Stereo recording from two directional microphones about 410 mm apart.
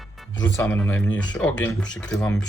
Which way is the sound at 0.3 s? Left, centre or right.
Centre.